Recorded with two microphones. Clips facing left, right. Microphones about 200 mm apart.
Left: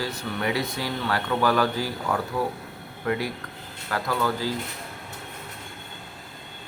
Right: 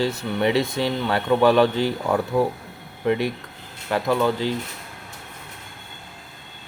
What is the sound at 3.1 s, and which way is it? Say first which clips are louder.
Speech: right 5 dB; 20° right (ahead or behind).